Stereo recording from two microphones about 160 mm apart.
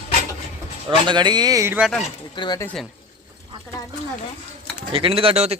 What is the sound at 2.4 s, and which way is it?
Speech, 25° left (ahead or behind).